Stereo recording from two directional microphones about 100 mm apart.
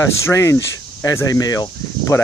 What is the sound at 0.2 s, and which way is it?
Speech, 30° left (ahead or behind).